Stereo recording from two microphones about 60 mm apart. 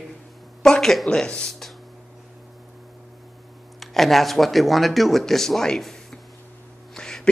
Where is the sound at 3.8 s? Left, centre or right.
Centre.